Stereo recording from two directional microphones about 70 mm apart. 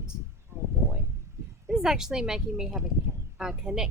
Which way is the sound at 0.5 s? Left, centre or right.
Right.